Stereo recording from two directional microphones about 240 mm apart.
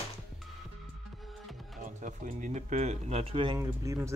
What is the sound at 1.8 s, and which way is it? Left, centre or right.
Speech, right.